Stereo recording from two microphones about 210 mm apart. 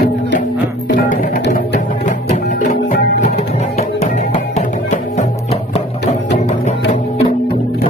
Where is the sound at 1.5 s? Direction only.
40° left (ahead or behind).